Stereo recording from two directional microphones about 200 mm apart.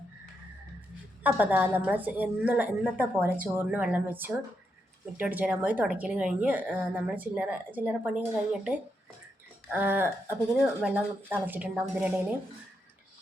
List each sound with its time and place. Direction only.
1.2 s speech: 10° right (ahead or behind)